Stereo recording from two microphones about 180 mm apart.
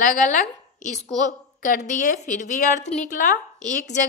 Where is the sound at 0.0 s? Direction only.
45° left (ahead or behind).